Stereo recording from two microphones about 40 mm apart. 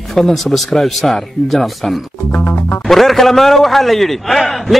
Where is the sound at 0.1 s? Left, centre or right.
Centre.